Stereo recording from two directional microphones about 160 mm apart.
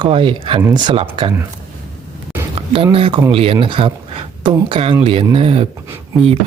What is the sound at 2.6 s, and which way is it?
A man's voice, 35° right (ahead or behind).